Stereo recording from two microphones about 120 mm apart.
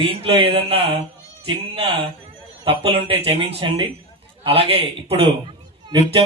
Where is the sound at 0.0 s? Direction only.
50° right (ahead or behind).